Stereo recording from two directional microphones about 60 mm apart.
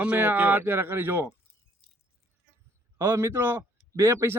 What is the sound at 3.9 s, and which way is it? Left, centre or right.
Speech, right.